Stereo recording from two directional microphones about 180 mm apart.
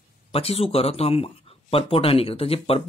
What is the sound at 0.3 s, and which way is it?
Speech, 35° left (ahead or behind).